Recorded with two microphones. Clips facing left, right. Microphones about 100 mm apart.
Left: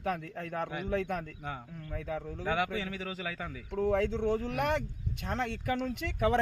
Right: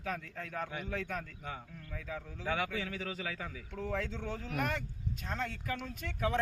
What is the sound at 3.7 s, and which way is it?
Speech, 60° left (ahead or behind).